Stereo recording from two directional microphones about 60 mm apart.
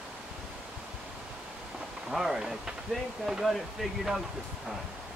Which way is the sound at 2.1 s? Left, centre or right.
Centre.